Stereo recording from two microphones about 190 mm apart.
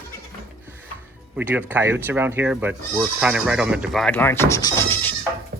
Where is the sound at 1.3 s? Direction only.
10° right (ahead or behind); by 5.2 s 10° left (ahead or behind).